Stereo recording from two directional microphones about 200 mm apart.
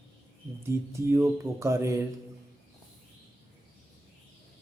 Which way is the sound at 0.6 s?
15° right (ahead or behind).